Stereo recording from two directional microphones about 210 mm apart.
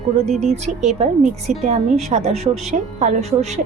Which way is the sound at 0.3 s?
30° right (ahead or behind).